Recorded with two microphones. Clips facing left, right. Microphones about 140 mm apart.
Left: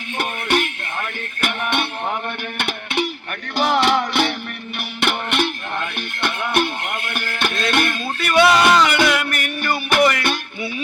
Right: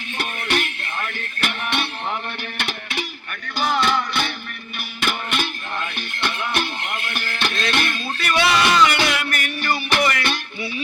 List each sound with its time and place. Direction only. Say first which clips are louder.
0.2 s music: left 4 dB; 50° left (ahead or behind)
3.5 s music: left 3 dB; 90° left
4.8 s music: left 3 dB; 65° left (ahead or behind)